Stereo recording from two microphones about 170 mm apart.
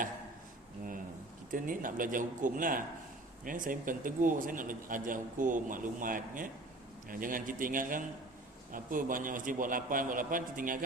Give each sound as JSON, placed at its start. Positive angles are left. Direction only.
{"t": 1.5, "sound": "a man's voice", "side_deg": -50}